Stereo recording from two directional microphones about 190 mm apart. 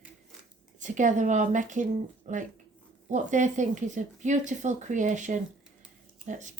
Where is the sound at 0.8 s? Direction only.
40° right (ahead or behind).